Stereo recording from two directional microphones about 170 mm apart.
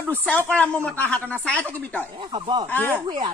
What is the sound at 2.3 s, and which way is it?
Speech, 25° right (ahead or behind).